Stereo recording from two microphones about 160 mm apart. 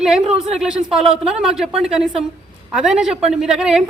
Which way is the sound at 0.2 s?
40° right (ahead or behind).